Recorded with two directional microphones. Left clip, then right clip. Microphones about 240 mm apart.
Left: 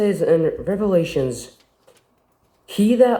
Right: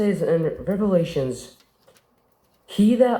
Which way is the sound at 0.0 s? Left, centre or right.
Left.